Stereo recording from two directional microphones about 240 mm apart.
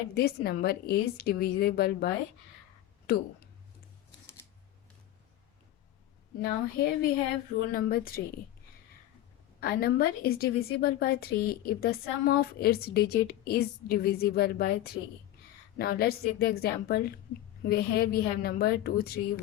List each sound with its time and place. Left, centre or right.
0.1 s a woman's voice: left
6.4 s a woman's voice: left
9.6 s a woman's voice: left